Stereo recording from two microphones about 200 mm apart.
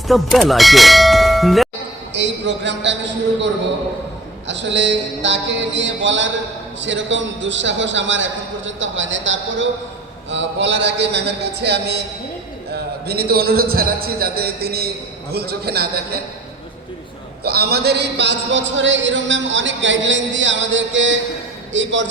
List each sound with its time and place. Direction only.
0.1 s clang: centre (ahead or behind)
2.1 s speech: 60° right (ahead or behind)
4.4 s mantra: 60° right (ahead or behind)
6.7 s music: 65° right (ahead or behind)
10.2 s mantra: 65° right (ahead or behind)
12.7 s a man's voice: 50° right (ahead or behind)
17.4 s music: 50° right (ahead or behind); by 21.2 s 70° right (ahead or behind)
21.7 s mantra: 65° right (ahead or behind)